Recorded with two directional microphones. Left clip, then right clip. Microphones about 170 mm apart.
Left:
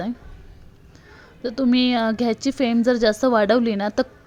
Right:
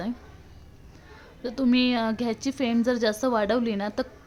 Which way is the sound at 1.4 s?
20° left (ahead or behind).